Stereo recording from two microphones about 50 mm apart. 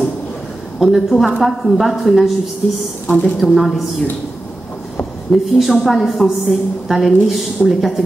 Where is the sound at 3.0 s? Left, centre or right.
Left.